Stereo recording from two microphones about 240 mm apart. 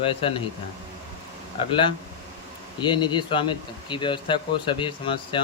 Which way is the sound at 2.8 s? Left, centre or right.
Centre.